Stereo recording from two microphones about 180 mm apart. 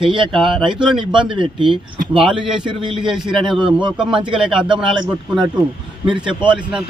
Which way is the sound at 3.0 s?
5° right (ahead or behind).